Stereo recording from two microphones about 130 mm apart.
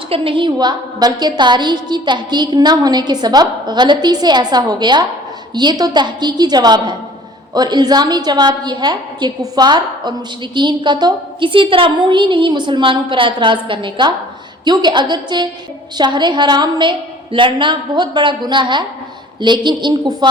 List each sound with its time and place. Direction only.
0.1 s a woman's voice: 40° right (ahead or behind)